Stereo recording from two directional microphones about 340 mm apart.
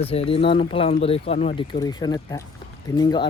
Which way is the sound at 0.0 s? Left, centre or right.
Centre.